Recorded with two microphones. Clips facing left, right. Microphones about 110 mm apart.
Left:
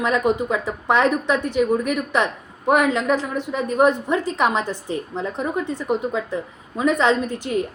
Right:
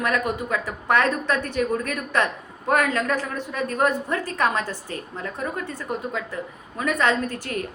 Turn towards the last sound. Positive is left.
turn(degrees=20)  # may be behind; listen again after turning